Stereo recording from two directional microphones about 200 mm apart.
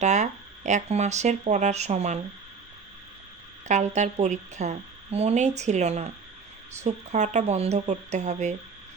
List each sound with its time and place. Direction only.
0.0 s speech: 35° right (ahead or behind)
3.9 s speech: 35° right (ahead or behind)